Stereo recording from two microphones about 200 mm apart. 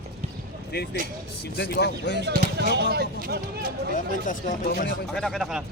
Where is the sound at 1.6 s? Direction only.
55° left (ahead or behind).